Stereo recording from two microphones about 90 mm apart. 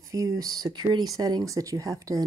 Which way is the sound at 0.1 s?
40° right (ahead or behind).